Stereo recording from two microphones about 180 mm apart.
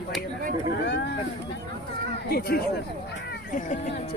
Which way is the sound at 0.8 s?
70° left (ahead or behind).